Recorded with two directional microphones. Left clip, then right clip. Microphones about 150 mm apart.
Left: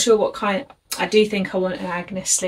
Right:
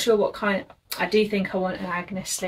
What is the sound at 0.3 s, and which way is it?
Speech, 20° left (ahead or behind).